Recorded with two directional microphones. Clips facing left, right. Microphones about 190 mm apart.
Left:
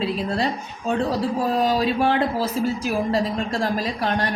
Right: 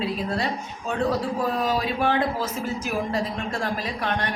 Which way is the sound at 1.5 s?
30° left (ahead or behind).